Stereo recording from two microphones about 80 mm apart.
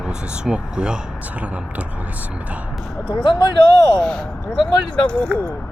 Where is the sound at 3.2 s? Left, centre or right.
Left.